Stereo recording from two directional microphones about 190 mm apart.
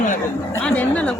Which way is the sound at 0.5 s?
10° left (ahead or behind).